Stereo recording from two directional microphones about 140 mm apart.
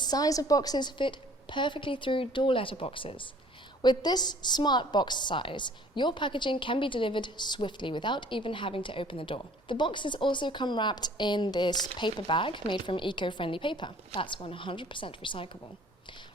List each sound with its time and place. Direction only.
0.0 s a woman's voice: 25° left (ahead or behind)